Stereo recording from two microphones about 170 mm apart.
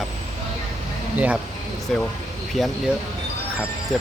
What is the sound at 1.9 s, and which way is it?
Speech, centre (ahead or behind).